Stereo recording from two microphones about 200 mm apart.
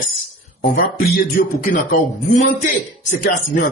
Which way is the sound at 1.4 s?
45° left (ahead or behind).